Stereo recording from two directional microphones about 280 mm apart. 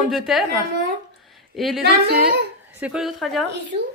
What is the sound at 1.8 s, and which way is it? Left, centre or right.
Speech, right.